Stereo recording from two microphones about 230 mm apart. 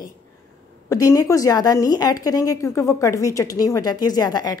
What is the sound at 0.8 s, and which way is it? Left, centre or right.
A woman's voice, centre.